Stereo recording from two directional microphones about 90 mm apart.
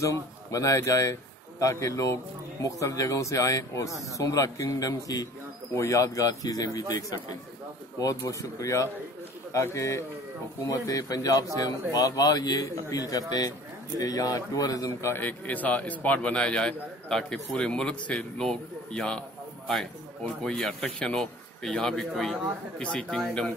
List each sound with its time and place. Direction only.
0.0 s speech: 40° left (ahead or behind)
15.1 s a man's voice: 20° left (ahead or behind)
20.4 s a man's voice: 5° left (ahead or behind)